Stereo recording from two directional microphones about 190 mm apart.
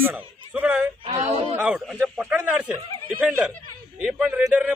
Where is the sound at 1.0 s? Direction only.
25° right (ahead or behind).